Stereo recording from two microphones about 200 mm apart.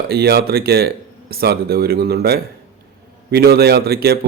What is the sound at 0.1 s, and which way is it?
Speech, 50° right (ahead or behind).